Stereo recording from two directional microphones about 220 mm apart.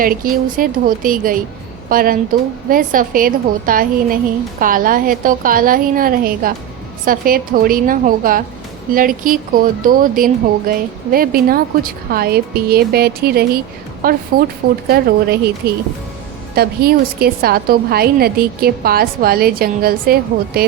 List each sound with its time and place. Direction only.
0.0 s a woman's voice: 40° right (ahead or behind)